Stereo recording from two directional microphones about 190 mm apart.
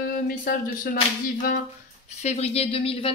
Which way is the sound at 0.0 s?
50° left (ahead or behind).